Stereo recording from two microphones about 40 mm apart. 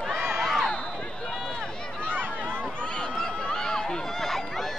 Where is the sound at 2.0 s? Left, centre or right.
Right.